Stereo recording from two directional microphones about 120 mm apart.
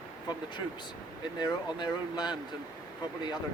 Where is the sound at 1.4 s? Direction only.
35° left (ahead or behind).